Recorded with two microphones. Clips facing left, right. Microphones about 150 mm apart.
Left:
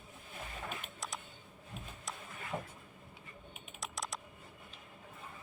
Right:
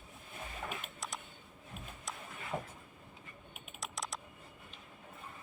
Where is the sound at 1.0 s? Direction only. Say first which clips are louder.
Even; centre (ahead or behind).